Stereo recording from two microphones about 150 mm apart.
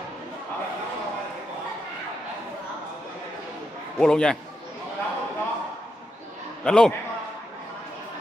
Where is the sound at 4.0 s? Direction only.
5° left (ahead or behind).